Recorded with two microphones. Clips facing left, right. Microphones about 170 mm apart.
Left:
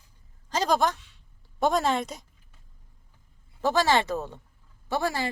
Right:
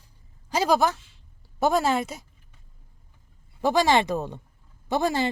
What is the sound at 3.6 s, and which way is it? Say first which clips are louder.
A woman's voice: right 2 dB; 15° right (ahead or behind).